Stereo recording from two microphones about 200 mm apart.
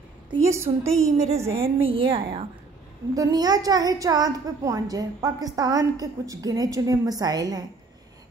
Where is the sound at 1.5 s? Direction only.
25° right (ahead or behind).